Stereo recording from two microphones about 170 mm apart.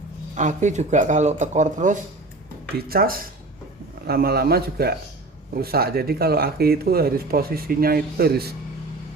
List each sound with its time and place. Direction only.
0.3 s speech: 45° right (ahead or behind)
2.7 s speech: 60° right (ahead or behind)